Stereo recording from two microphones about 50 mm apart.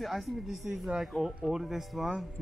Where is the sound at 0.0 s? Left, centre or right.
Centre.